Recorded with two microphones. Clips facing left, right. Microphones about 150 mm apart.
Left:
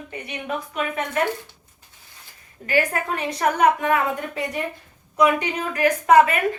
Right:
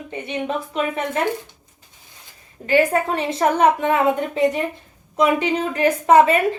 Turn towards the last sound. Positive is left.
turn(degrees=-25)  # may be behind; listen again after turning